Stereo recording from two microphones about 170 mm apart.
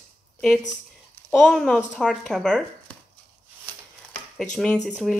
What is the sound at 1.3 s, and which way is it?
Speech, centre (ahead or behind).